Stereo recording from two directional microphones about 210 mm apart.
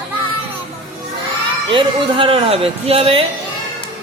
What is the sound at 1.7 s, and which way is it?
Speech, 25° right (ahead or behind).